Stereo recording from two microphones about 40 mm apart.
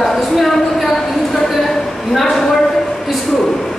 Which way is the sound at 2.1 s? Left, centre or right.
Centre.